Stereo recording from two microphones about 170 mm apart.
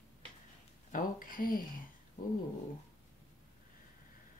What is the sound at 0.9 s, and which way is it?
Speech, 55° left (ahead or behind).